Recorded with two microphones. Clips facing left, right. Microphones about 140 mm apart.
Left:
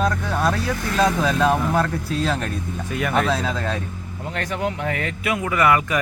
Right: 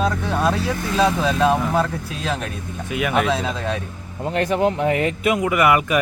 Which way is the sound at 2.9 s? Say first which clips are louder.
Right 1 dB; 10° right (ahead or behind).